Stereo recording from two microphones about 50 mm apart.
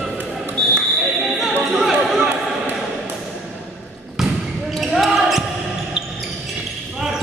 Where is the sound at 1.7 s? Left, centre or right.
Centre.